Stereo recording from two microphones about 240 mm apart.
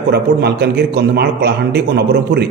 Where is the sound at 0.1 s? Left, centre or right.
Right.